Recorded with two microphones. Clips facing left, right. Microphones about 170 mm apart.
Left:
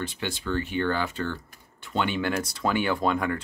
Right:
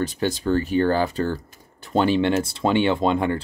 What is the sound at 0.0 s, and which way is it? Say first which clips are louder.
Speech: right 8 dB; 40° right (ahead or behind).